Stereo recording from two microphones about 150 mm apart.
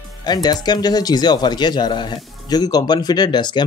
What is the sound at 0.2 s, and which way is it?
Speech, 25° left (ahead or behind).